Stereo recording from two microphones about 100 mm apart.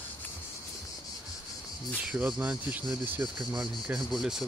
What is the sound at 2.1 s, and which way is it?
Speech, 15° right (ahead or behind).